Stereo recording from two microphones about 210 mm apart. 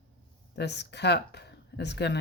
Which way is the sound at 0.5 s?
55° left (ahead or behind).